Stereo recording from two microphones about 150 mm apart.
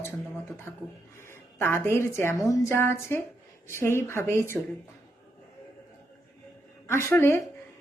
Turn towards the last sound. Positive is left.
turn(degrees=15)  # may be behind; listen again after turning